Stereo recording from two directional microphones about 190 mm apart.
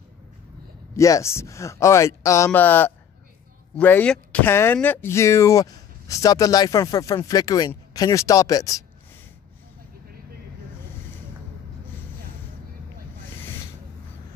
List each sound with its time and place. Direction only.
0.9 s speech: 15° left (ahead or behind)